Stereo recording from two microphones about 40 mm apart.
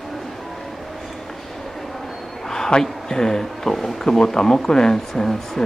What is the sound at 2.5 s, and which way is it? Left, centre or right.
Speech, centre.